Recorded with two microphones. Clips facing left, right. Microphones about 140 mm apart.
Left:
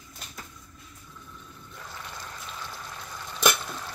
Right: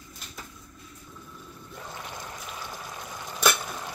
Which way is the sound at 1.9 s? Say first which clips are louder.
Right 2 dB; 20° right (ahead or behind).